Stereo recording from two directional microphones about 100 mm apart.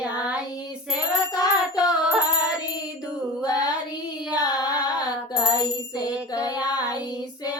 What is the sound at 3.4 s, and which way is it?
Child singing, 40° left (ahead or behind).